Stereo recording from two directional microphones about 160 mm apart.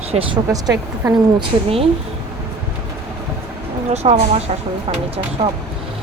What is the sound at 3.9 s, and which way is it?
Speech, 40° right (ahead or behind).